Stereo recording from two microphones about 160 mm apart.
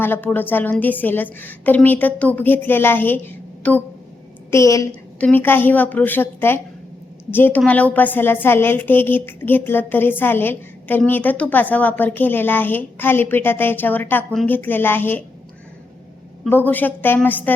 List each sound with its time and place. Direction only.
0.0 s a woman's voice: 10° left (ahead or behind)
16.5 s a woman's voice: 10° left (ahead or behind)